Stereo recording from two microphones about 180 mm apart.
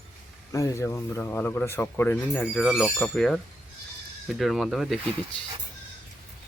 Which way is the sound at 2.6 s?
5° right (ahead or behind).